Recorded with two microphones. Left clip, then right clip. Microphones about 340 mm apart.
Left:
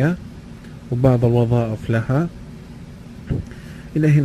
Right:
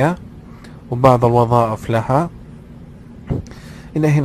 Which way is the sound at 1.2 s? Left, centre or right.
Right.